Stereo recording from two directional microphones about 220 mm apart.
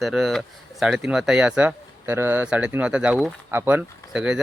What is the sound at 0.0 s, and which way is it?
Speech, centre (ahead or behind).